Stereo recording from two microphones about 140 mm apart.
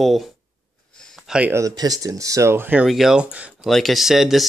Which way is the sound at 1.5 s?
25° right (ahead or behind).